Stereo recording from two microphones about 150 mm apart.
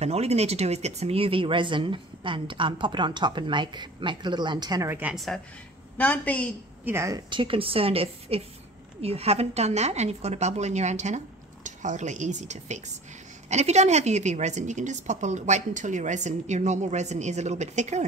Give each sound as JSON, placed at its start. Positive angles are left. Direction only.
{"t": 0.0, "sound": "speech", "side_deg": -45}
{"t": 4.8, "sound": "a woman's voice", "side_deg": -15}
{"t": 5.1, "sound": "a woman's voice", "side_deg": 0}
{"t": 6.8, "sound": "a woman's voice", "side_deg": -15}
{"t": 7.2, "sound": "a woman's voice", "side_deg": -35}